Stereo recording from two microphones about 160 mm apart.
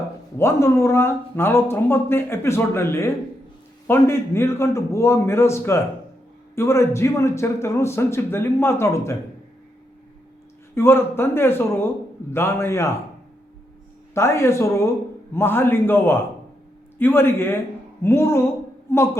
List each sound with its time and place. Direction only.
0.3 s speech: 15° left (ahead or behind)
10.8 s speech: 15° left (ahead or behind)
14.1 s speech: 15° left (ahead or behind)